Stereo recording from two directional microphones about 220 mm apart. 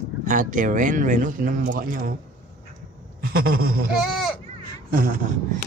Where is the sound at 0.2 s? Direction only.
35° right (ahead or behind).